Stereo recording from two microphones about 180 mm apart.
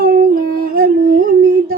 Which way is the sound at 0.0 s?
55° right (ahead or behind).